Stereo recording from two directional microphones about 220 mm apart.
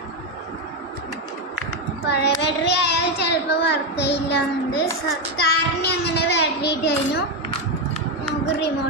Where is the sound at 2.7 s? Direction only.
50° left (ahead or behind).